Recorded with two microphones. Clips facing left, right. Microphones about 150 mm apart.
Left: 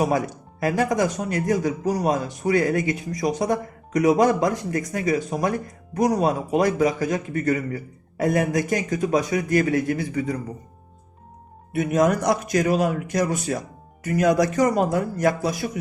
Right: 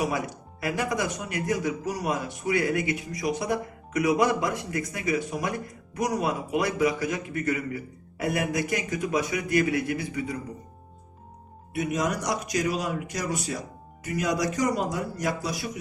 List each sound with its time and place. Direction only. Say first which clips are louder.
0.6 s a man's voice: left 7 dB; 40° left (ahead or behind)
11.7 s a man's voice: left 7 dB; 50° left (ahead or behind)